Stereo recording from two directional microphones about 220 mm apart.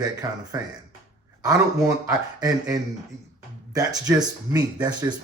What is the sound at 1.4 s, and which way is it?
Speech, 15° right (ahead or behind).